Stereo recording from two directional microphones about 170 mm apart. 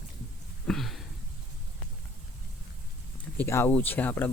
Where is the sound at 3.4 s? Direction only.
15° left (ahead or behind).